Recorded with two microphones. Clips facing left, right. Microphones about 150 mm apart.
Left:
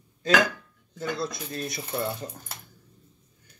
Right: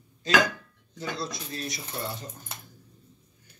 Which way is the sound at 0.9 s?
50° left (ahead or behind).